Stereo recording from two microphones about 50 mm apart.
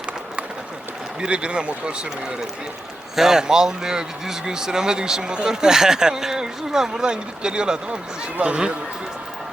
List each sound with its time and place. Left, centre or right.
1.2 s speech: centre
3.2 s speech: centre